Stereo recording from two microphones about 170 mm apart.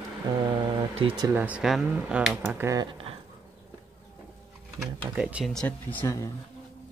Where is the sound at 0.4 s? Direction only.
30° right (ahead or behind).